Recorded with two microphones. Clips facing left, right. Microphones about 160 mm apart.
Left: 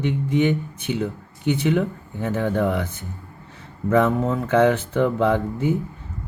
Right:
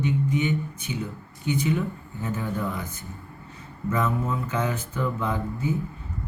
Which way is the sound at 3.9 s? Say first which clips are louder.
Left 8 dB; 75° left (ahead or behind).